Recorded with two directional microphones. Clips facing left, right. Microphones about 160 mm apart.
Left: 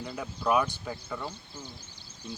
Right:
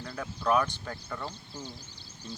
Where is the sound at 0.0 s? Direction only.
15° left (ahead or behind).